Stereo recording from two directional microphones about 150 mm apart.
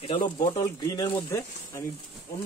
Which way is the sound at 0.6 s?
25° left (ahead or behind).